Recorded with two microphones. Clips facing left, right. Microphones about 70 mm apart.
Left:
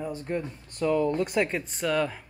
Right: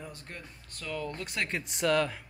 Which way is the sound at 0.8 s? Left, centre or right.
Left.